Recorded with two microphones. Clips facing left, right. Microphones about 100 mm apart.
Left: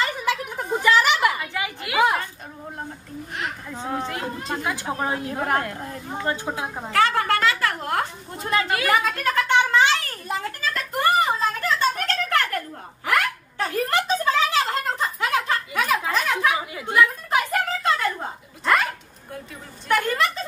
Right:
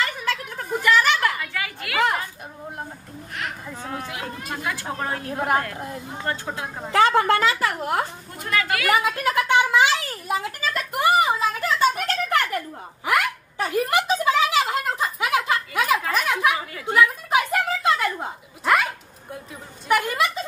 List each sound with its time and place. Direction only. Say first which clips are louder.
0.0 s a sound: left 2 dB; 15° left (ahead or behind)
3.3 s speech: left 1 dB; 20° left (ahead or behind)
5.3 s a woman's voice: right 4 dB; 5° right (ahead or behind)
6.2 s speech: left 2 dB; 20° left (ahead or behind)
6.9 s a woman's voice: right 3 dB; 20° right (ahead or behind)
8.4 s speech: left 1 dB; 30° left (ahead or behind)
8.8 s a sound: right 1 dB; 10° right (ahead or behind)